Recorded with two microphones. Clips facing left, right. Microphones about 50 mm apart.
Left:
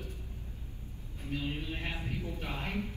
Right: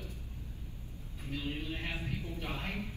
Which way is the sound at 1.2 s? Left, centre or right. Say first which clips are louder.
Left 2 dB; left.